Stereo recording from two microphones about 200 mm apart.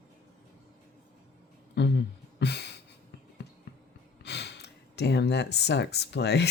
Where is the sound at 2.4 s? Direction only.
55° left (ahead or behind).